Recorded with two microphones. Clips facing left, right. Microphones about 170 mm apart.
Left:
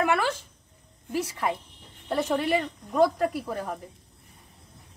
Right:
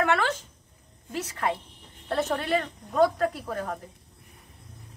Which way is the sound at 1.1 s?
10° left (ahead or behind).